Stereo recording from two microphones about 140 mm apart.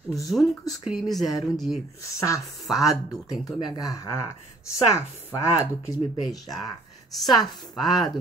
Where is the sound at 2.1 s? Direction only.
20° left (ahead or behind).